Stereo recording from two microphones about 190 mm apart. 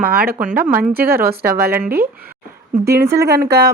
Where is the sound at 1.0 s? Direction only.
55° right (ahead or behind).